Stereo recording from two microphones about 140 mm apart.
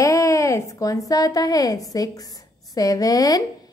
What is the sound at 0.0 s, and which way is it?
A woman's voice, 25° left (ahead or behind).